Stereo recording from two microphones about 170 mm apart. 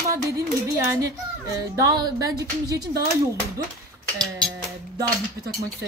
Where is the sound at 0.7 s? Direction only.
20° right (ahead or behind).